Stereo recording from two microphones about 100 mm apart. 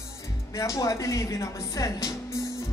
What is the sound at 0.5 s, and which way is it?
Speech, 35° left (ahead or behind).